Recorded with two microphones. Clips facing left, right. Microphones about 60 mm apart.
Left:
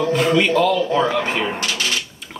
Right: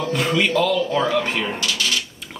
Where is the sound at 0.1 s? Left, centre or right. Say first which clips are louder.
Left 2 dB; centre.